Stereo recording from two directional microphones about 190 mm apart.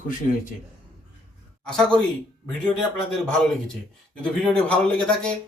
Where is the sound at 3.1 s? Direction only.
5° left (ahead or behind).